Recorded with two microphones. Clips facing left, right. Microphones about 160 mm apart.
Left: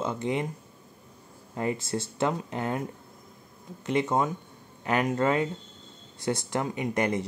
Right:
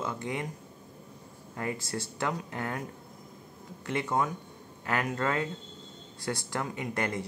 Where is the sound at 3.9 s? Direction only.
20° left (ahead or behind).